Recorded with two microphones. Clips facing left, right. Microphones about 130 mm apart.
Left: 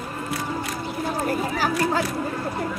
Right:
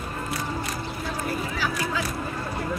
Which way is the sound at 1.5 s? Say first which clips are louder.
Left 5 dB; 45° left (ahead or behind).